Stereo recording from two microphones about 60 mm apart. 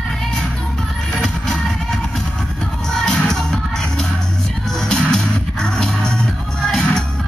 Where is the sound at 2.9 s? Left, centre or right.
Centre.